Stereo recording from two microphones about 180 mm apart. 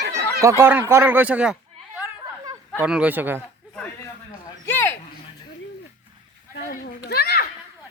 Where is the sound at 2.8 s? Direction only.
5° right (ahead or behind).